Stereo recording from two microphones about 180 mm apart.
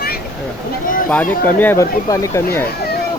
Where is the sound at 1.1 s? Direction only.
10° left (ahead or behind).